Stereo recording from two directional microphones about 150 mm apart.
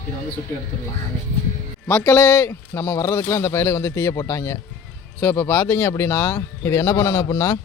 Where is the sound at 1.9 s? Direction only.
15° left (ahead or behind).